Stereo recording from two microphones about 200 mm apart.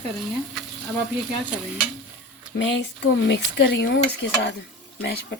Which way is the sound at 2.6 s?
60° left (ahead or behind).